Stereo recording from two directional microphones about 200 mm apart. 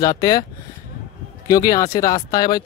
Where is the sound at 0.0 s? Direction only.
15° left (ahead or behind).